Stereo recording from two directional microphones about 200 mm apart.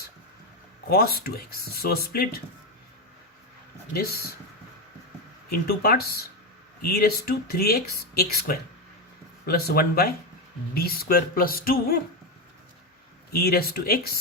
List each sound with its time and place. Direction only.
0.9 s speech: 50° left (ahead or behind)
3.9 s speech: 50° left (ahead or behind)
5.5 s speech: 50° left (ahead or behind)
13.3 s speech: 50° left (ahead or behind)